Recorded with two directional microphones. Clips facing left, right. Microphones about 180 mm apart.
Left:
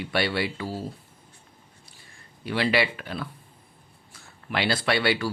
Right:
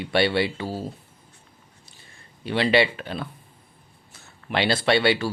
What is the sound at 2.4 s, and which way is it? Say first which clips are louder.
Speech: right 4 dB; 25° right (ahead or behind).